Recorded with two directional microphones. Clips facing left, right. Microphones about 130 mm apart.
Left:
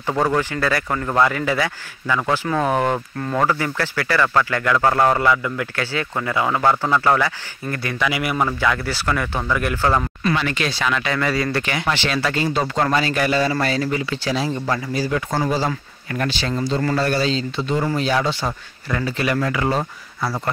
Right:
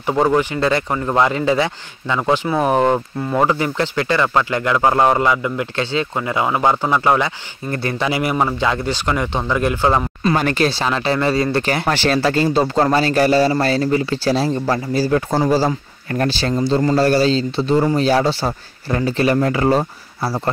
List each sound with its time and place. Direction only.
0.0 s a man's voice: 15° right (ahead or behind)
7.7 s a man's voice: 30° right (ahead or behind)
10.3 s speech: 45° right (ahead or behind)
10.8 s a man's voice: 30° right (ahead or behind)
11.6 s speech: 40° right (ahead or behind)